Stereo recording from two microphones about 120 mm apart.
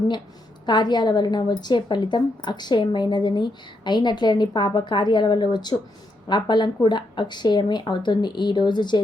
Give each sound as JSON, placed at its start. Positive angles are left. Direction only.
{"t": 0.6, "sound": "a woman's voice", "side_deg": 35}